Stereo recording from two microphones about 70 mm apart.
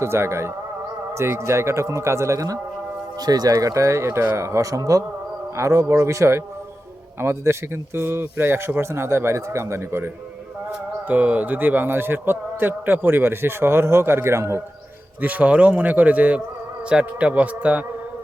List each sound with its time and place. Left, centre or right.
0.0 s a man's voice: right
3.2 s a man's voice: right
11.1 s a man's voice: right
15.2 s a man's voice: right